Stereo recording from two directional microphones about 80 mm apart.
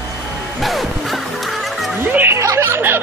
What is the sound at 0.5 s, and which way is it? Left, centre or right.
Music, centre.